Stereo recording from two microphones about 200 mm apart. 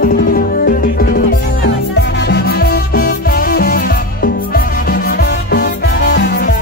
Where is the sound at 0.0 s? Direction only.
50° left (ahead or behind).